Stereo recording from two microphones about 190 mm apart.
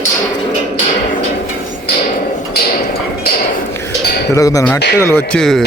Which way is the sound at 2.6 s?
55° left (ahead or behind).